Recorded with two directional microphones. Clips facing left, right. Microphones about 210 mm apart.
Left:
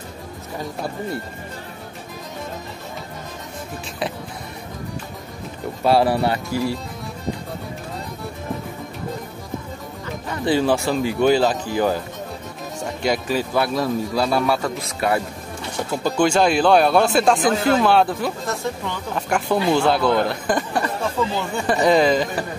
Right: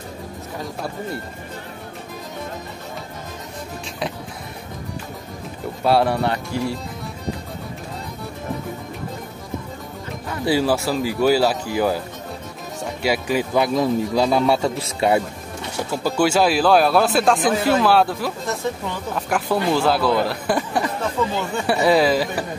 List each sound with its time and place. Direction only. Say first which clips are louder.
5.9 s speech: left 1 dB; centre (ahead or behind)
10.3 s speech: even; 5° right (ahead or behind)
13.0 s a man's voice: right 1 dB; 10° right (ahead or behind)
15.7 s speech: even; 5° right (ahead or behind)
21.6 s speech: left 1 dB; 5° right (ahead or behind)